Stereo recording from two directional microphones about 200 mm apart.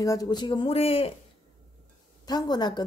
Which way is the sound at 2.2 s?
20° left (ahead or behind).